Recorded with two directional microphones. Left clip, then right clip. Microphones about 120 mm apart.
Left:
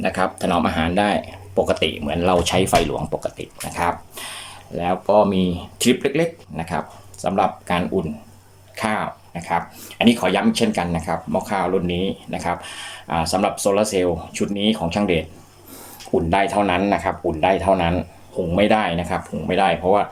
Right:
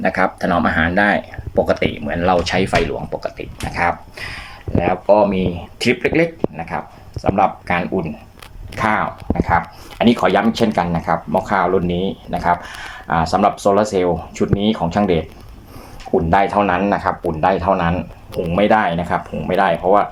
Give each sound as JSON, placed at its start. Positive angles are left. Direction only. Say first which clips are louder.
{"t": 0.0, "sound": "speech", "louder": "right 4 dB", "side_deg": 10}
{"t": 16.3, "sound": "speech", "louder": "right 4 dB", "side_deg": 20}